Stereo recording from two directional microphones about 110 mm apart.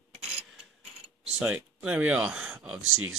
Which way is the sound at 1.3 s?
10° right (ahead or behind).